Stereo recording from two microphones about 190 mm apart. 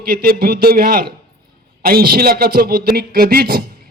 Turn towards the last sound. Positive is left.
turn(degrees=-50)  # may be behind; listen again after turning